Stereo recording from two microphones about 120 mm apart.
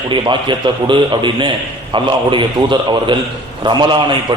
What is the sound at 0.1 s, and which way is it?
A man's voice, 40° right (ahead or behind).